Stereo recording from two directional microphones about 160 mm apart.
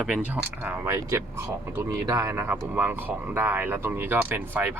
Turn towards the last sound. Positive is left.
turn(degrees=-15)  # may be behind; listen again after turning